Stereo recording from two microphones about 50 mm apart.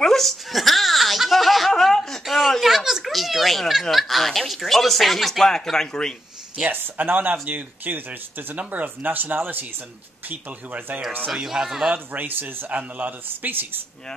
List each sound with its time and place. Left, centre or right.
0.0 s a sound: centre
3.9 s speech: centre
6.6 s speech: right
11.3 s speech: centre
12.1 s speech: right